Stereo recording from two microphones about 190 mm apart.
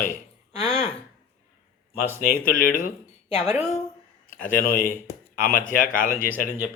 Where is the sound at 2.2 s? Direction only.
45° left (ahead or behind).